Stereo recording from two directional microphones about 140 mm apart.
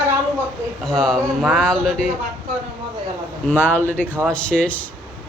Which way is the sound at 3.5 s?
15° left (ahead or behind).